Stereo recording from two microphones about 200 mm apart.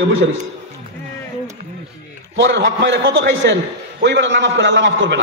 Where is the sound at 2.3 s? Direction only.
60° right (ahead or behind).